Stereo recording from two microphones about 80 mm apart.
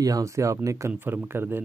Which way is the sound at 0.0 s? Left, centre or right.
Right.